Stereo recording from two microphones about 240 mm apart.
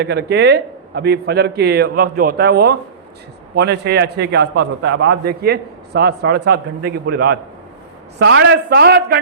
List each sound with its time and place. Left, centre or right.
0.0 s a man's voice: right